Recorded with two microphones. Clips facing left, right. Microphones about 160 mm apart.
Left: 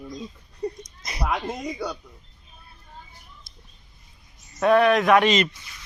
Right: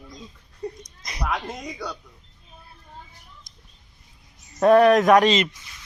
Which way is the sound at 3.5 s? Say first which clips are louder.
Left 2 dB; 15° right (ahead or behind).